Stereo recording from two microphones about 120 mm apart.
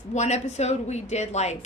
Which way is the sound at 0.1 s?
70° left (ahead or behind).